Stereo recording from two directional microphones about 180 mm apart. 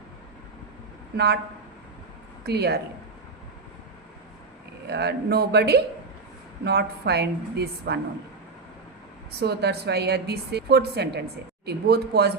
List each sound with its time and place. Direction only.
1.1 s a sound: 65° right (ahead or behind)
2.4 s speech: 65° right (ahead or behind)
4.9 s a woman's voice: 65° right (ahead or behind)
9.4 s a woman's voice: 65° right (ahead or behind)